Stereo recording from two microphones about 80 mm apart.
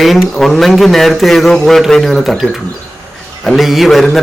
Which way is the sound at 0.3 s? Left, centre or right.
Centre.